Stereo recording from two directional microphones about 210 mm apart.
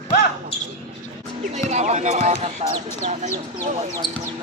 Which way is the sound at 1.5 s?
35° right (ahead or behind).